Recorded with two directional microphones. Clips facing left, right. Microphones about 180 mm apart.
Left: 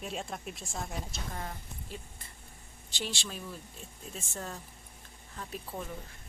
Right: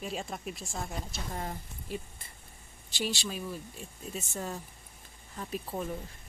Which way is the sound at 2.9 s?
5° right (ahead or behind).